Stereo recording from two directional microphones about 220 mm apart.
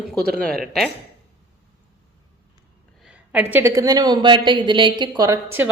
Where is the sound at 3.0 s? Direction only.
5° right (ahead or behind).